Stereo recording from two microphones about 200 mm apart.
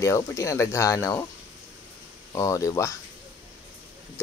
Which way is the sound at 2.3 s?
15° left (ahead or behind).